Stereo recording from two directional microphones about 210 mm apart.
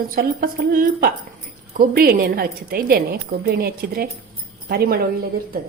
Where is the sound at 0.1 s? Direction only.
45° right (ahead or behind).